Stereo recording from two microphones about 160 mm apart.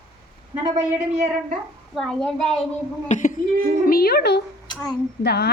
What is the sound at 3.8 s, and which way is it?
Speech, 75° left (ahead or behind).